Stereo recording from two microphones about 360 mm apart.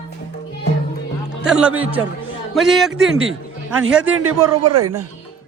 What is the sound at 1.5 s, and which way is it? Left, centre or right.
Speech, centre.